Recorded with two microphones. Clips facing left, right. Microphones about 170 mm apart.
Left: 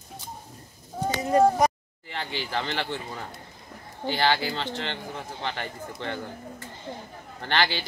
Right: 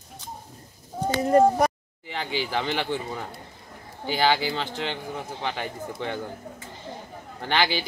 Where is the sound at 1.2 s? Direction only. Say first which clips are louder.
Right 2 dB; 55° right (ahead or behind).